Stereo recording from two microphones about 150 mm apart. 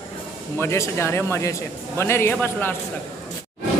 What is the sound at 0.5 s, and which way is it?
Speech, 15° left (ahead or behind).